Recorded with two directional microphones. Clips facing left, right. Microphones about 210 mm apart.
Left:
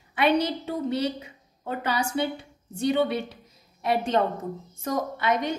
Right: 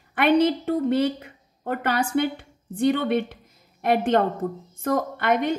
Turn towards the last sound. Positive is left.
turn(degrees=-55)  # may be behind; listen again after turning